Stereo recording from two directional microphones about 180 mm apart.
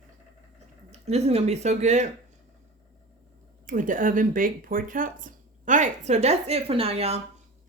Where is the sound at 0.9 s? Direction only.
35° right (ahead or behind).